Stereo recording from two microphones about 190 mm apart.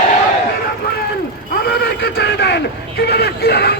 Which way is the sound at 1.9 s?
55° left (ahead or behind).